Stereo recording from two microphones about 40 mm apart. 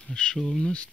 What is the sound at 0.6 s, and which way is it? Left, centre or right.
Speech, left.